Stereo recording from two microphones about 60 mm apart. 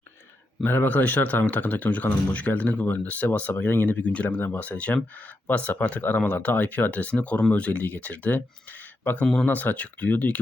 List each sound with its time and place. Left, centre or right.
0.6 s speech: left
9.2 s speech: centre
9.5 s speech: left